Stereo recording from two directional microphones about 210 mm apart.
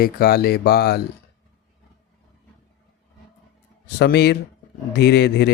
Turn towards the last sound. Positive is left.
turn(degrees=50)  # may be behind; listen again after turning